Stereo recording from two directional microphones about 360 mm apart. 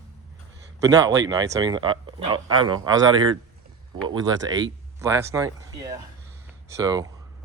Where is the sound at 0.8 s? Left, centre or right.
Centre.